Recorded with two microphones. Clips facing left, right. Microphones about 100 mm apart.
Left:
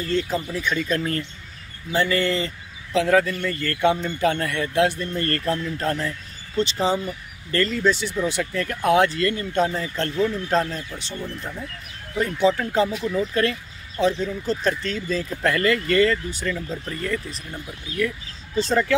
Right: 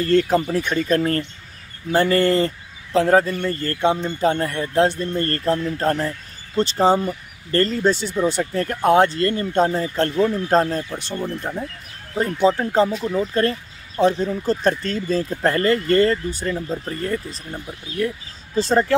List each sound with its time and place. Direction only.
0.1 s speech: 55° right (ahead or behind)
11.2 s speech: 35° right (ahead or behind)